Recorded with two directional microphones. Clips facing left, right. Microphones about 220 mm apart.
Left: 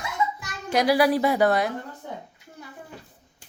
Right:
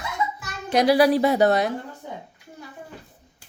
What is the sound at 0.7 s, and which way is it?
A woman's voice, 25° right (ahead or behind).